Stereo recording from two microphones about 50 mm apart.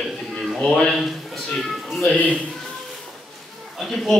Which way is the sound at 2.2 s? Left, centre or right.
Left.